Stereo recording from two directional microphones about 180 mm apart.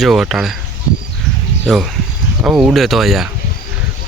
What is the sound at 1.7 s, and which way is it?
Speech, centre (ahead or behind).